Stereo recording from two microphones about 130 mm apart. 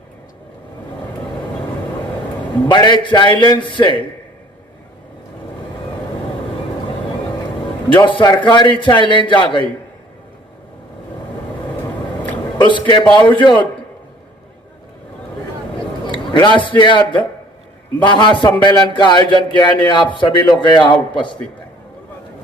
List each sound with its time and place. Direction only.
2.6 s speech: 35° left (ahead or behind)
7.9 s speech: 35° left (ahead or behind)
12.5 s speech: 40° left (ahead or behind)
16.0 s a sound: 40° left (ahead or behind)
16.6 s speech: 40° left (ahead or behind)